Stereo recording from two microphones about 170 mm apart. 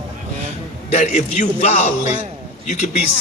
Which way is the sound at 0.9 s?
40° left (ahead or behind).